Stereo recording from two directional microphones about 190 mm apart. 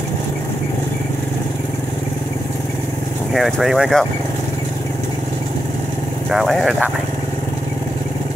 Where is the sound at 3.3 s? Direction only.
Centre (ahead or behind).